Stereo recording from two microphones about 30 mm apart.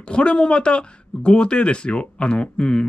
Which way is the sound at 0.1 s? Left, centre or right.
Left.